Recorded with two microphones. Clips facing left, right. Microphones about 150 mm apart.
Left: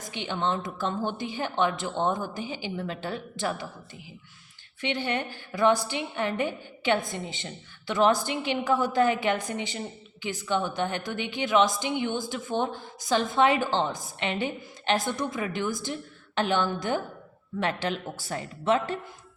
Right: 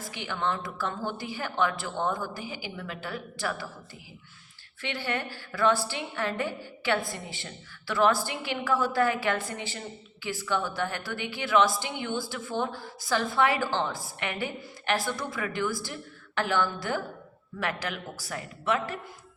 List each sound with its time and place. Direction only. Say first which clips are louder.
0.0 s a woman's voice: left 2 dB; 20° left (ahead or behind)
4.8 s a woman's voice: left 3 dB; 20° left (ahead or behind)